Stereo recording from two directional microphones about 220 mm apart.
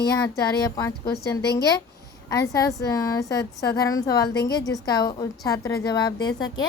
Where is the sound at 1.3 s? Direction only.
15° left (ahead or behind).